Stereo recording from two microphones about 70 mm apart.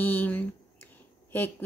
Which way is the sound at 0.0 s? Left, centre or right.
Left.